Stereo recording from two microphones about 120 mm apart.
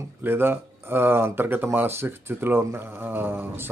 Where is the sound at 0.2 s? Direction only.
20° right (ahead or behind).